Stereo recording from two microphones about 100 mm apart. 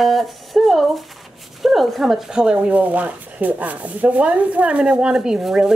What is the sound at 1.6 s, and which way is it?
Speech, centre (ahead or behind).